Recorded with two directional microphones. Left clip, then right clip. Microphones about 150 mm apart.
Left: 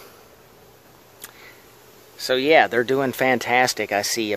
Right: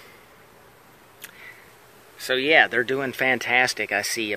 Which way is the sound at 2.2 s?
15° left (ahead or behind).